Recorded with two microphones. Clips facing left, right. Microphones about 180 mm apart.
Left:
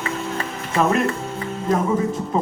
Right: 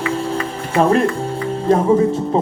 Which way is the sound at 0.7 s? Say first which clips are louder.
Right 5 dB; 30° right (ahead or behind).